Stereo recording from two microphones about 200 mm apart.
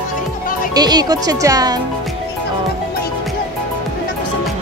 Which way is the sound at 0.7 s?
20° right (ahead or behind).